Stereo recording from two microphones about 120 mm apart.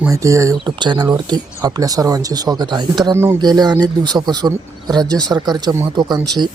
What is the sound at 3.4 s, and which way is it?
Speech, 35° right (ahead or behind).